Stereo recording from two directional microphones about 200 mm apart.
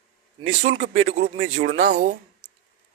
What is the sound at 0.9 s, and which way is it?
Speech, 75° right (ahead or behind).